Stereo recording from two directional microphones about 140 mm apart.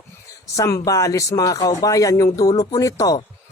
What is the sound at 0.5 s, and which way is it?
Speech, 25° left (ahead or behind).